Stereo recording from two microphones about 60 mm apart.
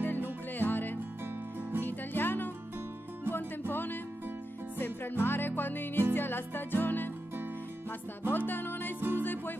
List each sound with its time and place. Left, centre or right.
0.6 s music: left
8.3 s music: left